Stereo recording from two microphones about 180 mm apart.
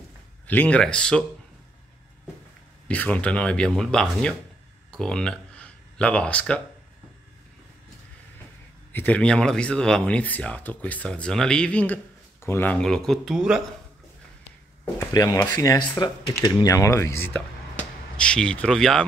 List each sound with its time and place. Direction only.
0.5 s speech: 10° left (ahead or behind)
2.9 s speech: 10° left (ahead or behind)
8.9 s speech: 10° left (ahead or behind)
15.0 s speech: 15° left (ahead or behind)